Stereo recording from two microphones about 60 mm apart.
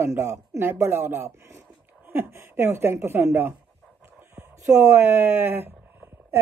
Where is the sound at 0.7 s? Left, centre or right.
Right.